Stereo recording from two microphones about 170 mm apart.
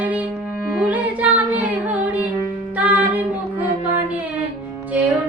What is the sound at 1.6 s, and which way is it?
Carnatic music, 10° right (ahead or behind).